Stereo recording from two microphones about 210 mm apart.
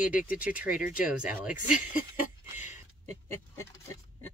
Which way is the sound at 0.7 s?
40° left (ahead or behind).